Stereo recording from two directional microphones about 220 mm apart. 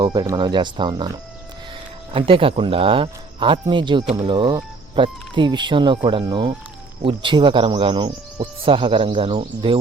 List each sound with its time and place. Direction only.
0.0 s speech: 20° right (ahead or behind)
2.1 s speech: 25° right (ahead or behind)